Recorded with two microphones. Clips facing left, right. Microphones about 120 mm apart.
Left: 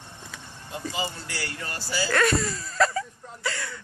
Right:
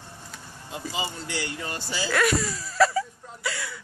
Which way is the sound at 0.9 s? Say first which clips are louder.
Right 3 dB; 20° right (ahead or behind).